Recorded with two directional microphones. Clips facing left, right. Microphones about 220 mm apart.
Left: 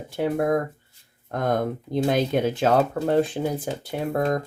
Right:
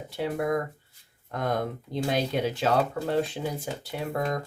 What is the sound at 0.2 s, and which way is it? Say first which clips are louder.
Speech: left 5 dB; 50° left (ahead or behind).